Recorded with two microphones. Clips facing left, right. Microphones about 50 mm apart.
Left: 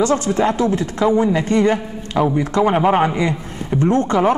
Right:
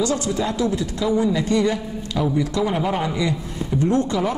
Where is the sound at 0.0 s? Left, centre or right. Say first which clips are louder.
Left 6 dB; left.